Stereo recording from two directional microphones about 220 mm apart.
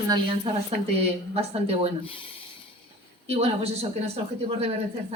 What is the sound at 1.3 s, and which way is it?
Speech, 25° right (ahead or behind).